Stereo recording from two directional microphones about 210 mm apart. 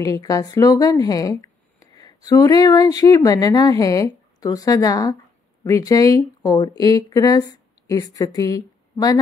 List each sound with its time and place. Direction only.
0.0 s speech: 15° left (ahead or behind)